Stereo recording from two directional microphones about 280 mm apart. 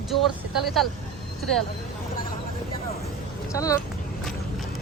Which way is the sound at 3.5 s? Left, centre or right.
Centre.